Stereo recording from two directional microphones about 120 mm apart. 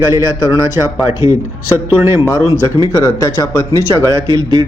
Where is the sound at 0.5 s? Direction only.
25° right (ahead or behind).